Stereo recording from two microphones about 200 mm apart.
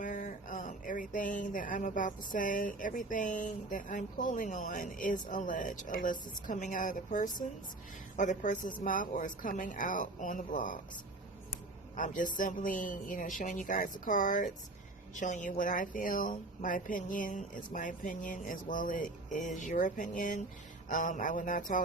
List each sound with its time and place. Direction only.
0.0 s speech: 40° left (ahead or behind)
11.9 s a woman's voice: 40° left (ahead or behind)